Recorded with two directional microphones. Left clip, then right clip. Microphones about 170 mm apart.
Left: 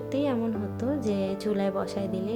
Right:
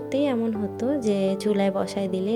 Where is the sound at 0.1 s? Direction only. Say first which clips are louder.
Right 4 dB; 30° right (ahead or behind).